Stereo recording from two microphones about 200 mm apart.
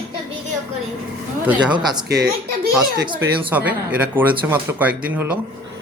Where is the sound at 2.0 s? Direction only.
50° right (ahead or behind).